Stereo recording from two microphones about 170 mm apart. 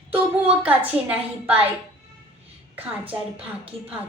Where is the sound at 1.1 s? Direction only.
10° right (ahead or behind).